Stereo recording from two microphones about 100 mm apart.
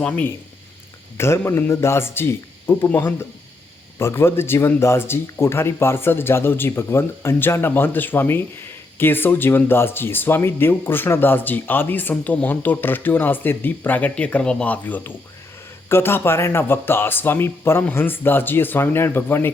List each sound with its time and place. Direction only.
0.0 s speech: 15° left (ahead or behind)
1.1 s speech: 25° left (ahead or behind)